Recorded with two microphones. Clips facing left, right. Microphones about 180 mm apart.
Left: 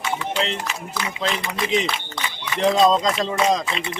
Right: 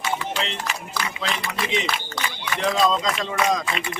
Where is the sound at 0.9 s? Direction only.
20° left (ahead or behind).